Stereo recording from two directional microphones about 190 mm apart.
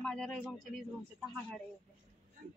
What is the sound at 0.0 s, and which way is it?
Speech, 5° left (ahead or behind).